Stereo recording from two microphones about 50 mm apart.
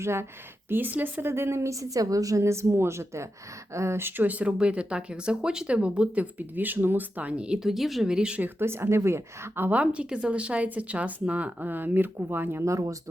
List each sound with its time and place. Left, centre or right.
0.0 s a woman's voice: right
0.7 s speech: right
1.3 s a woman's voice: right
4.0 s speech: right
6.6 s speech: right
7.6 s speech: centre
8.0 s speech: centre
8.5 s a woman's voice: right
9.8 s speech: right
12.6 s speech: right